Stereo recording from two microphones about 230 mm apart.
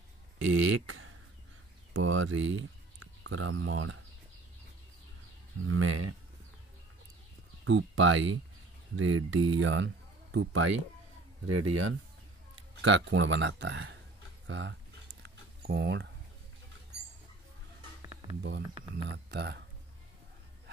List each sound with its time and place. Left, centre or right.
0.5 s speech: right
5.7 s speech: right
7.6 s speech: right
9.6 s speech: right
11.4 s speech: right
12.8 s speech: right
14.5 s a sound: right
18.0 s music: centre
19.0 s speech: right